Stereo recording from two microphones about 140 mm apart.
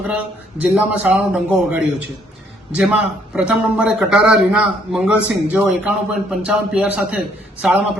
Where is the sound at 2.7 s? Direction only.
5° right (ahead or behind).